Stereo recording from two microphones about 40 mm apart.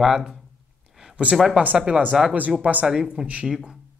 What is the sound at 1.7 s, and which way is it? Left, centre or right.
Speech, right.